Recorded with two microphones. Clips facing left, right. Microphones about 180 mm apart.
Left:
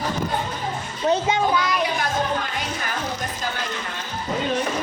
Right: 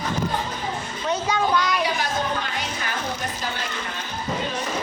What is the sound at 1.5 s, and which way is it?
Child singing, centre (ahead or behind).